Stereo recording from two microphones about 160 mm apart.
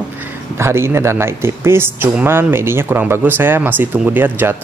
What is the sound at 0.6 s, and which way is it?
Speech, 15° right (ahead or behind).